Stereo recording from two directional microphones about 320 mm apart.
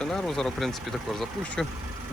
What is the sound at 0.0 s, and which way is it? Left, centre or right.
Speech, centre.